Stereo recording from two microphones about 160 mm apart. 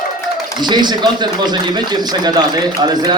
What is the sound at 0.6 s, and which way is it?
A man's voice, 25° right (ahead or behind).